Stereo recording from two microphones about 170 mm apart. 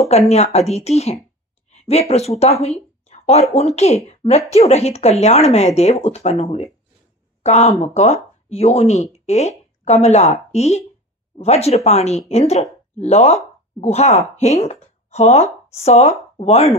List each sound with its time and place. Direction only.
0.3 s speech: 40° left (ahead or behind)